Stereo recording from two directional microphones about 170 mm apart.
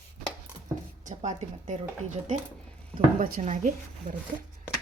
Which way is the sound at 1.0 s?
45° right (ahead or behind).